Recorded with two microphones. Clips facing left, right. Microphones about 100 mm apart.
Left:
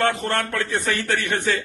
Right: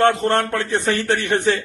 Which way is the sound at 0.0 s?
25° right (ahead or behind).